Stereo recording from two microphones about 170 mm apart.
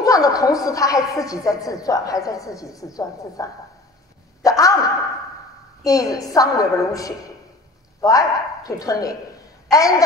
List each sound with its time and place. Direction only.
0.0 s a woman's voice: 20° left (ahead or behind)
4.4 s a sound: 20° left (ahead or behind)
5.9 s a woman's voice: 20° left (ahead or behind)